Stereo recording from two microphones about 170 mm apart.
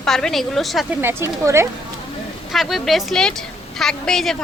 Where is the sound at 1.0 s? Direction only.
15° right (ahead or behind).